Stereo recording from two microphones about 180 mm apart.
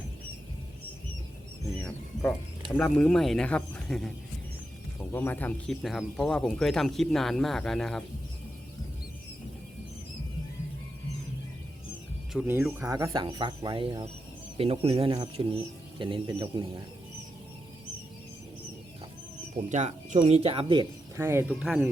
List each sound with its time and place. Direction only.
2.7 s speech: 5° left (ahead or behind)
12.3 s speech: 5° right (ahead or behind)
12.9 s speech: 20° right (ahead or behind)
19.5 s speech: 40° right (ahead or behind)
21.2 s speech: 15° right (ahead or behind)